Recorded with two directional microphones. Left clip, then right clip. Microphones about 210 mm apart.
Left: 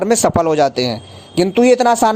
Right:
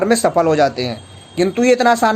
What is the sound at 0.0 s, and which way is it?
Speech, 35° left (ahead or behind).